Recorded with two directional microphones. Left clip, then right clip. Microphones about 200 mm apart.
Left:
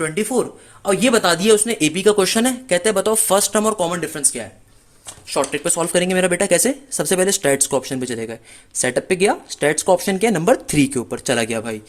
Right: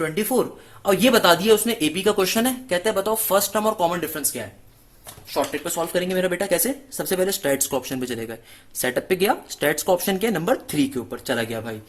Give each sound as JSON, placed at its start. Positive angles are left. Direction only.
{"t": 0.0, "sound": "speech", "side_deg": 15}
{"t": 5.3, "sound": "speech", "side_deg": 45}